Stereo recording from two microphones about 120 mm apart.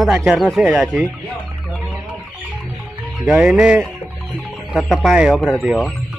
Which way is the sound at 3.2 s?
10° right (ahead or behind).